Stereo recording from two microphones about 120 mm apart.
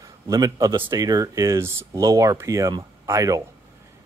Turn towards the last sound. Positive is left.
turn(degrees=-25)  # may be behind; listen again after turning